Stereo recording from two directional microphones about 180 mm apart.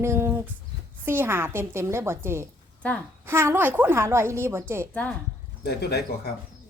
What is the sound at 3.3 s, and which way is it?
Speech, 15° right (ahead or behind).